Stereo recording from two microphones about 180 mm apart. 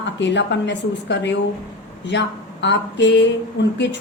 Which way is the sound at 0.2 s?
75° left (ahead or behind).